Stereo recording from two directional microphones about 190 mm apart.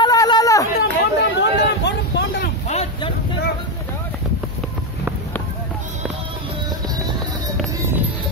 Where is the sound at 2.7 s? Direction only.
35° left (ahead or behind).